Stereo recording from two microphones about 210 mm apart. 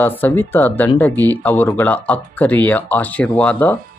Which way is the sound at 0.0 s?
10° left (ahead or behind).